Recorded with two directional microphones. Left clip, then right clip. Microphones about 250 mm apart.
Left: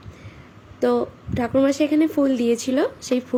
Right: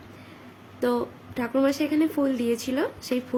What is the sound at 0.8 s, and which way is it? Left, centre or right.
Speech, centre.